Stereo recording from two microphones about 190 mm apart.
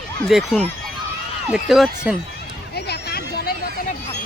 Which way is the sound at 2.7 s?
60° left (ahead or behind).